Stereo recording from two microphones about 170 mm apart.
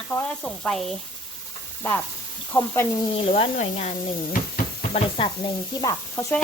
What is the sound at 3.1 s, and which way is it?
Speech, 35° left (ahead or behind).